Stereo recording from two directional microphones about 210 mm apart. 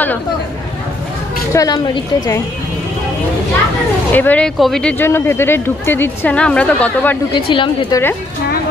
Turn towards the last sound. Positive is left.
turn(degrees=25)  # may be behind; listen again after turning